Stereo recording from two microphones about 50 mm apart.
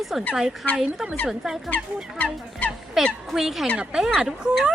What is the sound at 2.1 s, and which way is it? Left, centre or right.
Fowl, left.